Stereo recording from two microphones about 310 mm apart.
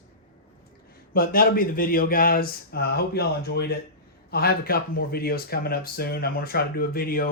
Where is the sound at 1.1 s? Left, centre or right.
Left.